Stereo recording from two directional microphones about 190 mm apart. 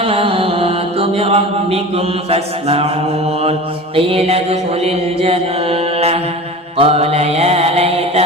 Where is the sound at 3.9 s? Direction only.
30° right (ahead or behind).